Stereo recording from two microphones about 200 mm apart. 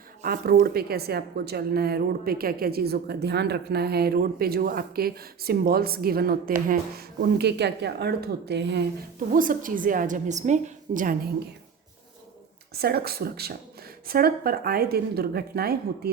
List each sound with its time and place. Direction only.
0.2 s a woman's voice: 40° right (ahead or behind)
7.3 s a woman's voice: 55° right (ahead or behind)
9.3 s a woman's voice: 45° right (ahead or behind)
12.7 s a woman's voice: 50° right (ahead or behind)